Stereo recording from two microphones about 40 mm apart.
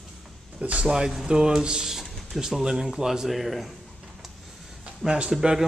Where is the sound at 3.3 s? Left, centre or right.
Centre.